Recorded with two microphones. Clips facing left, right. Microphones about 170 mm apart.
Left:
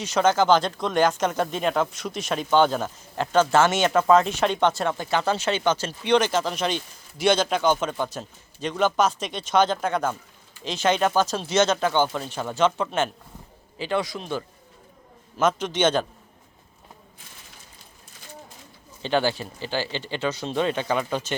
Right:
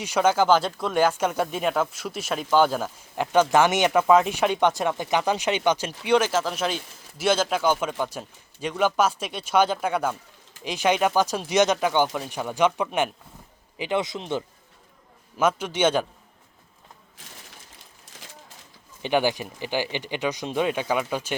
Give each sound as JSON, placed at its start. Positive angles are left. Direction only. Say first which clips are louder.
{"t": 0.0, "sound": "a man's voice", "louder": "even", "side_deg": -10}
{"t": 15.4, "sound": "speech", "louder": "even", "side_deg": -10}
{"t": 19.0, "sound": "speech", "louder": "right 1 dB", "side_deg": -15}